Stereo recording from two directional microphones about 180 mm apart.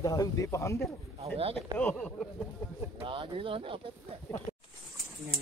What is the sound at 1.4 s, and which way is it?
Speech, 30° right (ahead or behind).